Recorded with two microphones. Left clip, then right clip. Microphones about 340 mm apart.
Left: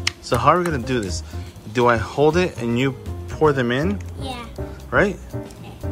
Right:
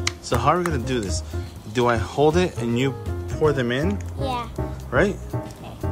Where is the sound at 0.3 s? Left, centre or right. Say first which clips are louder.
Left 4 dB; centre.